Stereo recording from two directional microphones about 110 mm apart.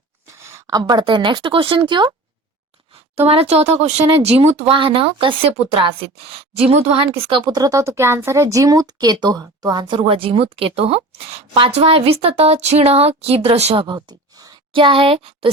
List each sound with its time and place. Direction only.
0.3 s a woman's voice: 25° right (ahead or behind); by 2.1 s 45° right (ahead or behind)
2.9 s speech: 65° right (ahead or behind)
4.7 s speech: 50° right (ahead or behind)
6.5 s speech: 70° right (ahead or behind)
13.8 s a sound: 40° right (ahead or behind)
14.7 s speech: 50° right (ahead or behind)